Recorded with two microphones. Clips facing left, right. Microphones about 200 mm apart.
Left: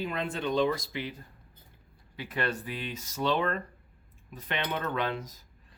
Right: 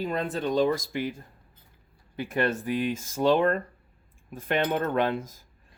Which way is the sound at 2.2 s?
50° right (ahead or behind).